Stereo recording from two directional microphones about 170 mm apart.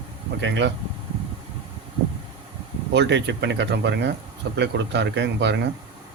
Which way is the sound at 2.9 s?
90° right.